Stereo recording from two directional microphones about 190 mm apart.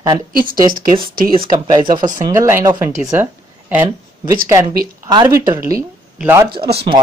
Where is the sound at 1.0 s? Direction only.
50° right (ahead or behind).